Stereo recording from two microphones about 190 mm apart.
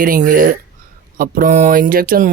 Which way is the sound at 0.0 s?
45° right (ahead or behind).